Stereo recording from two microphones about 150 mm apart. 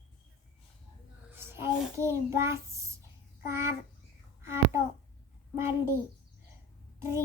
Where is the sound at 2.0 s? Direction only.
20° right (ahead or behind).